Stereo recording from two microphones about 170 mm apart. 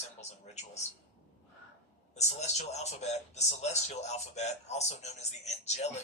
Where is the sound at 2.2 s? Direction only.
40° left (ahead or behind).